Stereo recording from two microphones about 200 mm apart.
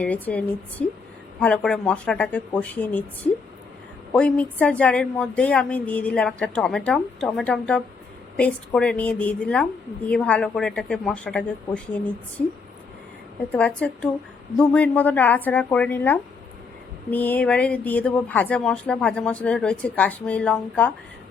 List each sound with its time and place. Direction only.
0.0 s a woman's voice: 5° left (ahead or behind)
13.5 s speech: 5° left (ahead or behind)